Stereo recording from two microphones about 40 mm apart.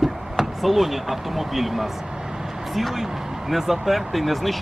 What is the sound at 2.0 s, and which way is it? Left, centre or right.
Speech, centre.